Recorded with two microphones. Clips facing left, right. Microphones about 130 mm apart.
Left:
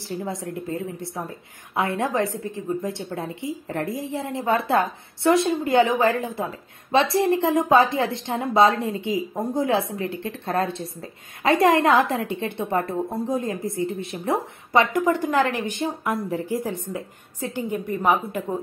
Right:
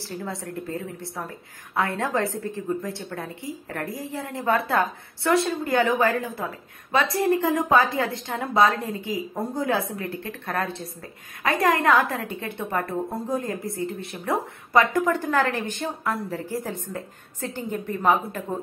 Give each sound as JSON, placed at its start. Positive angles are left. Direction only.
{"t": 0.1, "sound": "a woman's voice", "side_deg": 20}